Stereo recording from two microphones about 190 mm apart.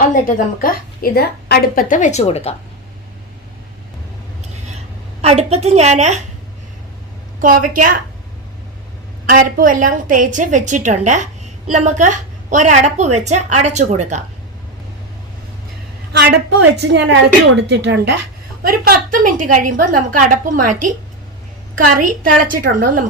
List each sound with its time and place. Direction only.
0.0 s a woman's voice: 45° left (ahead or behind)
5.2 s a woman's voice: 30° right (ahead or behind)
7.4 s a woman's voice: 45° right (ahead or behind)
9.6 s a woman's voice: 45° right (ahead or behind)
16.2 s a woman's voice: 60° right (ahead or behind)
18.6 s a woman's voice: 50° right (ahead or behind)
21.9 s a woman's voice: 45° right (ahead or behind)